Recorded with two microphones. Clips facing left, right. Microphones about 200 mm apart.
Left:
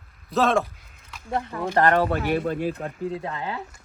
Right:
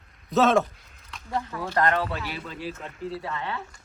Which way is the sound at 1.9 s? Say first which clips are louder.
Left 7 dB; 50° left (ahead or behind).